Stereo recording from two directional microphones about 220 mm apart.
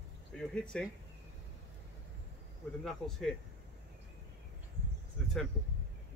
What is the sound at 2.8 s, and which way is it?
Speech, 5° left (ahead or behind).